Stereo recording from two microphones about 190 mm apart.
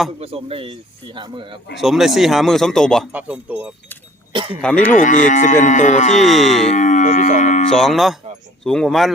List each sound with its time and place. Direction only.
0.2 s speech: 30° right (ahead or behind)
1.8 s a man's voice: centre (ahead or behind)
3.1 s speech: 5° right (ahead or behind)
4.3 s speech: 25° right (ahead or behind)
4.6 s speech: 5° left (ahead or behind)
4.9 s moo: 45° left (ahead or behind)
5.6 s speech: 40° left (ahead or behind)
6.1 s a man's voice: centre (ahead or behind)
6.6 s speech: 40° left (ahead or behind)
7.7 s a man's voice: centre (ahead or behind)